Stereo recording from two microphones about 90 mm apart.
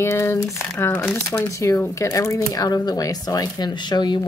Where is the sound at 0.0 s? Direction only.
30° left (ahead or behind).